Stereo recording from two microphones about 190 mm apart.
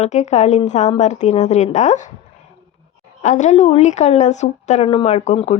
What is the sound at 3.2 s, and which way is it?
A woman's voice, 40° left (ahead or behind).